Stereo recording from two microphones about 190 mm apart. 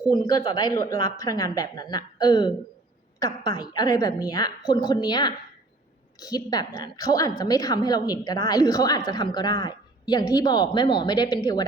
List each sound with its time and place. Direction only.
0.1 s a woman's voice: 20° left (ahead or behind)